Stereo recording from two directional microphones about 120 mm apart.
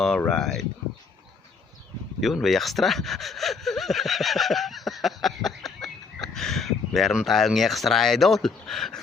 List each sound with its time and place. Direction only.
0.3 s speech: 5° left (ahead or behind)
2.2 s speech: centre (ahead or behind)